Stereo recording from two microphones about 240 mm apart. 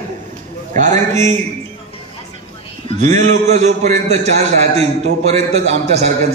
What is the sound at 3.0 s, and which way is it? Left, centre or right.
A man's voice, right.